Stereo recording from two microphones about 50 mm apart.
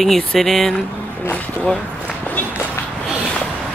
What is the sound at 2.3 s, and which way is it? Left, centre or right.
Walk, left.